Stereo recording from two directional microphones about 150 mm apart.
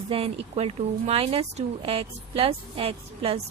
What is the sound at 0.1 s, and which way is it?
Speech, 45° right (ahead or behind).